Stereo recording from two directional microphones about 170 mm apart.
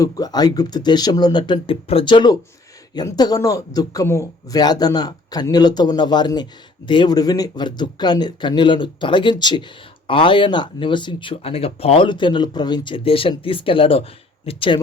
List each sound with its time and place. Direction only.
0.0 s speech: 20° left (ahead or behind)